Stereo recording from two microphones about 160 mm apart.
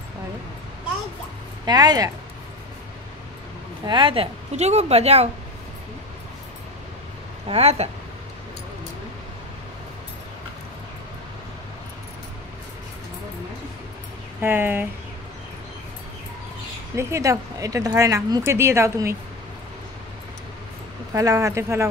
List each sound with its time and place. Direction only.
1.7 s speech: 25° right (ahead or behind)
3.8 s a woman's voice: 30° right (ahead or behind)
7.4 s a woman's voice: 40° right (ahead or behind)
14.4 s speech: 15° right (ahead or behind)
16.9 s speech: 20° right (ahead or behind)
21.1 s speech: 20° right (ahead or behind)